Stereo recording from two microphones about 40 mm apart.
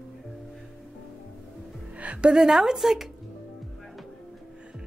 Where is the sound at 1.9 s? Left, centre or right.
Right.